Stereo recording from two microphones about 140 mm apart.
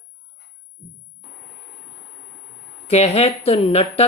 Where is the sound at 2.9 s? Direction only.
50° left (ahead or behind).